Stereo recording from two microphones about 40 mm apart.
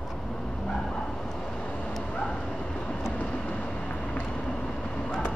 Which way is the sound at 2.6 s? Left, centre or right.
Left.